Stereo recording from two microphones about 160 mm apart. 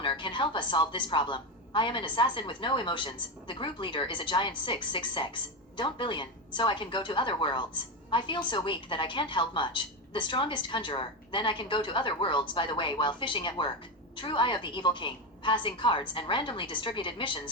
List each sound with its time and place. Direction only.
0.0 s a woman's voice: 30° left (ahead or behind)